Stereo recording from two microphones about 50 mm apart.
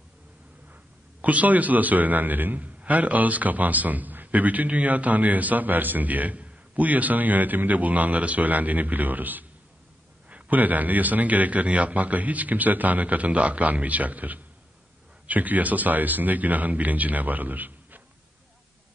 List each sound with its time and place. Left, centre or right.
1.2 s a man's voice: right